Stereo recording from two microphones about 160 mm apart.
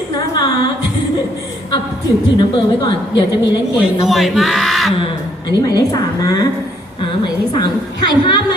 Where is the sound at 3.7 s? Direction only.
Centre (ahead or behind).